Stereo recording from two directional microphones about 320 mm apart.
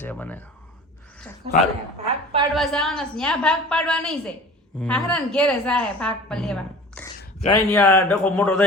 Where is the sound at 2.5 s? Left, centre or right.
Centre.